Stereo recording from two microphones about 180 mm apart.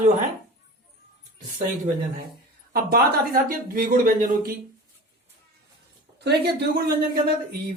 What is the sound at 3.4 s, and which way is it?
Speech, 55° right (ahead or behind).